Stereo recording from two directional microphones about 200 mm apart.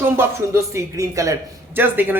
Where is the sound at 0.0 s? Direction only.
10° right (ahead or behind).